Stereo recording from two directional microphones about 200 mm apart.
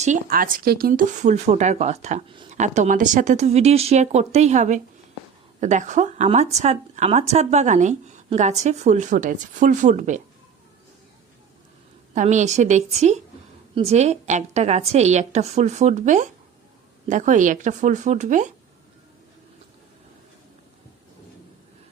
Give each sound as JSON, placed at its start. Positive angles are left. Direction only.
{"t": 0.0, "sound": "a woman's voice", "side_deg": -40}
{"t": 2.3, "sound": "a sound", "side_deg": -25}
{"t": 2.6, "sound": "a woman's voice", "side_deg": -35}
{"t": 12.1, "sound": "a woman's voice", "side_deg": -35}